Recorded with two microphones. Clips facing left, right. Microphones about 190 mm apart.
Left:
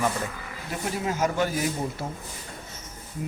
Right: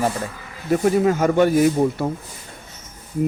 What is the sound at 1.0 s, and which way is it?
Speech, 55° right (ahead or behind).